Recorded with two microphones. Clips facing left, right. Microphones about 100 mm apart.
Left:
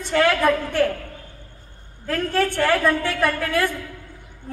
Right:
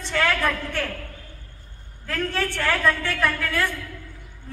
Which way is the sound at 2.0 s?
15° left (ahead or behind).